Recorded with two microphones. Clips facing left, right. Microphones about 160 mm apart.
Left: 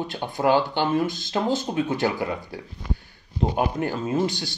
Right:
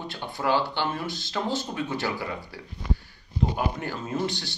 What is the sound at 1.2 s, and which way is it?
Speech, 45° left (ahead or behind).